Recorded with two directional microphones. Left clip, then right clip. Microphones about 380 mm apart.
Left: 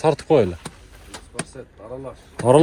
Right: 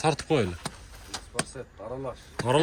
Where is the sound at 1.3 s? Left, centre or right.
Right.